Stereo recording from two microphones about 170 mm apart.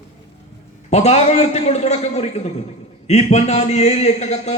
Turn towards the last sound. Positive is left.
turn(degrees=40)  # may be behind; listen again after turning